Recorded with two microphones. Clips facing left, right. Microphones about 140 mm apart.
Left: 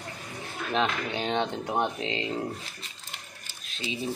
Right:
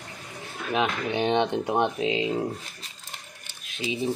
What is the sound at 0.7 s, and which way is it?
Speech, 15° right (ahead or behind).